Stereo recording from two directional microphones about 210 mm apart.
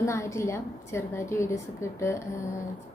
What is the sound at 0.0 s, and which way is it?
A woman's voice, 15° left (ahead or behind).